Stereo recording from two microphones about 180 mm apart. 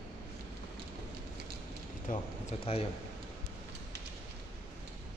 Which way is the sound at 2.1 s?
45° left (ahead or behind).